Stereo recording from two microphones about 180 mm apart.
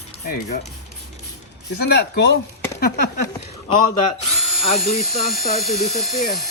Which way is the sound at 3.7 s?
30° left (ahead or behind).